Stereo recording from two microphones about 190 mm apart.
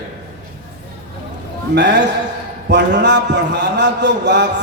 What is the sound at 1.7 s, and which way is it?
A man's voice, 65° right (ahead or behind).